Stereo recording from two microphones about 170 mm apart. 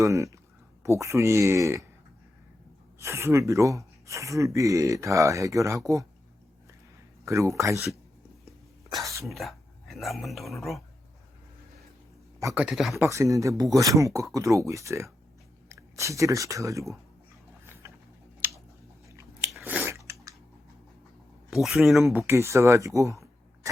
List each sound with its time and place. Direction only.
0.0 s speech: 20° right (ahead or behind)
3.0 s speech: 15° right (ahead or behind)
7.3 s speech: 15° right (ahead or behind)
8.9 s speech: 20° right (ahead or behind)
9.2 s speech: centre (ahead or behind)
12.5 s speech: 5° right (ahead or behind)
13.0 s speech: 20° right (ahead or behind)
17.8 s a sound: 15° right (ahead or behind)
19.6 s chewing: 10° right (ahead or behind)
21.5 s speech: centre (ahead or behind)
22.3 s speech: 15° right (ahead or behind)